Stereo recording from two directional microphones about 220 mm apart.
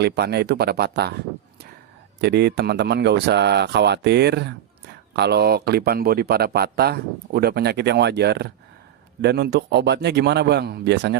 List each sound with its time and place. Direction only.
0.0 s speech: 50° right (ahead or behind)
2.2 s speech: 50° right (ahead or behind)